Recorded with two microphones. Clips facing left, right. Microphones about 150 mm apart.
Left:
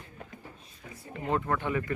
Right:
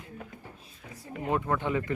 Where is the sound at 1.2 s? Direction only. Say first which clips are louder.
Right 1 dB; 15° right (ahead or behind).